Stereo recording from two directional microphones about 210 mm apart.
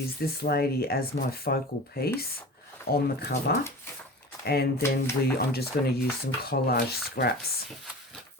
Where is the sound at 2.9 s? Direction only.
50° left (ahead or behind).